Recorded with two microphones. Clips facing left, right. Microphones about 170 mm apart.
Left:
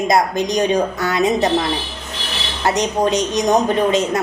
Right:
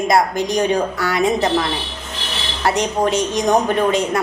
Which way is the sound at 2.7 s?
20° left (ahead or behind).